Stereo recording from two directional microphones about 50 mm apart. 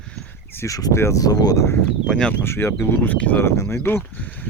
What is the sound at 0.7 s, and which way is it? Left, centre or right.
Speech, left.